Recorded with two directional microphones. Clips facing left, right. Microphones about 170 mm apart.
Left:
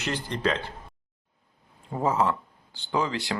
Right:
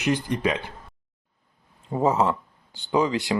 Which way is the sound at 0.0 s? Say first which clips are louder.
Right 4 dB; 15° right (ahead or behind).